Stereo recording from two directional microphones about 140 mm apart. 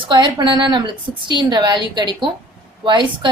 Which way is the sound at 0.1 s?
35° right (ahead or behind).